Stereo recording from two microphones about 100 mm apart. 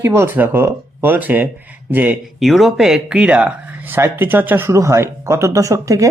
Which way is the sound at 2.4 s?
Centre (ahead or behind).